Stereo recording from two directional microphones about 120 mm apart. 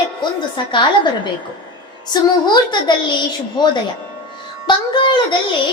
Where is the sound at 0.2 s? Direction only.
40° left (ahead or behind).